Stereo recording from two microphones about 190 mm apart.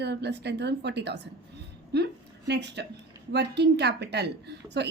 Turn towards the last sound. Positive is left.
turn(degrees=-60)  # may be behind; listen again after turning